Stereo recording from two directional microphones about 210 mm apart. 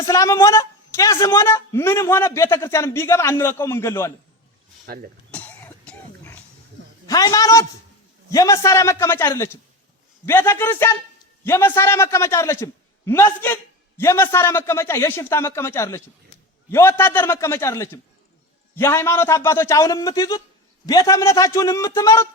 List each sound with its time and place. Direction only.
0.1 s a man's voice: 15° left (ahead or behind)
4.9 s speech: 45° right (ahead or behind)
5.3 s throat clearing: 5° left (ahead or behind)
7.1 s a man's voice: 15° left (ahead or behind)